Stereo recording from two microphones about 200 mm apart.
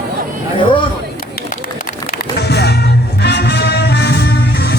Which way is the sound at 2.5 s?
55° left (ahead or behind).